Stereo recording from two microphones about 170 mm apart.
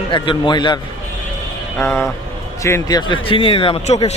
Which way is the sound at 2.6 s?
20° left (ahead or behind).